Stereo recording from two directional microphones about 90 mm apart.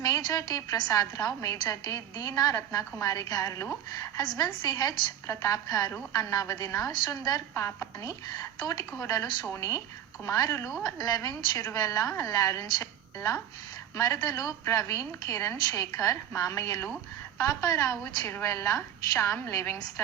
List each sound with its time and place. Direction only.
0.0 s a woman's voice: 45° left (ahead or behind)
4.2 s a woman's voice: 55° left (ahead or behind)
7.5 s a woman's voice: 30° left (ahead or behind)